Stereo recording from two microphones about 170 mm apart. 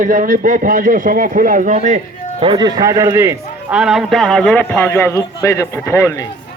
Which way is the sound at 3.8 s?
Centre (ahead or behind).